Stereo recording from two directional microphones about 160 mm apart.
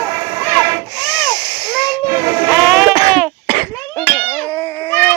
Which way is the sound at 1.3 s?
30° right (ahead or behind).